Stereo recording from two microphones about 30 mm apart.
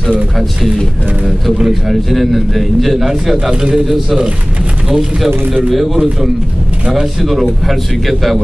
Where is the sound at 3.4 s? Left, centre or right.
Right.